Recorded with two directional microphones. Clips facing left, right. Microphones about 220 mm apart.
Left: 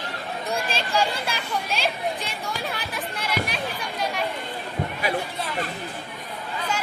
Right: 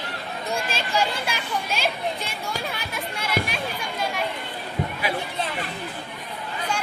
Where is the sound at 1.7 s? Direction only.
Centre (ahead or behind).